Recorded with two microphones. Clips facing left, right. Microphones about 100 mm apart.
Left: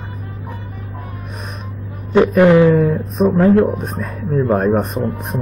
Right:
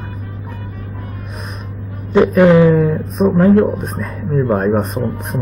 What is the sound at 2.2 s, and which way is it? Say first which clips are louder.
Speech: right 1 dB; 15° right (ahead or behind).